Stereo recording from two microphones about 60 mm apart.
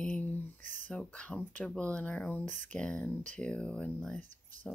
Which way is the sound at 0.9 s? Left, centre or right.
Left.